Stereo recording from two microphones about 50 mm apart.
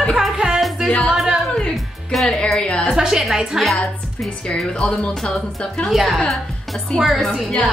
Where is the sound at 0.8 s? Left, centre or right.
Centre.